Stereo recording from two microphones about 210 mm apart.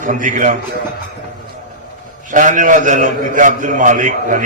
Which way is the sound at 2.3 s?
40° right (ahead or behind).